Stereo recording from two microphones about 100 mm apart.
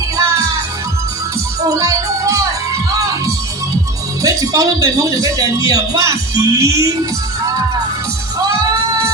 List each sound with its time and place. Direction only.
1.7 s music: 35° right (ahead or behind)
4.2 s speech: 35° right (ahead or behind)